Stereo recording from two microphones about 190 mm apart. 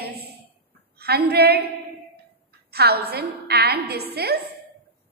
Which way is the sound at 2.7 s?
55° right (ahead or behind).